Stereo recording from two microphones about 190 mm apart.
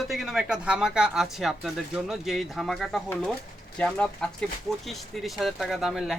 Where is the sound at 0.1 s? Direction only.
5° right (ahead or behind).